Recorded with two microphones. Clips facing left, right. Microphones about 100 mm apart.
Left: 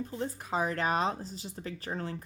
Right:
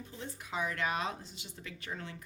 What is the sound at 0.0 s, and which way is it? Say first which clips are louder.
Speech: left 9 dB; 40° left (ahead or behind).